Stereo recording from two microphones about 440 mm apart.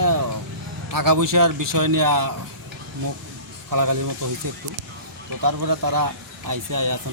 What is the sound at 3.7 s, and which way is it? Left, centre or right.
Speech, right.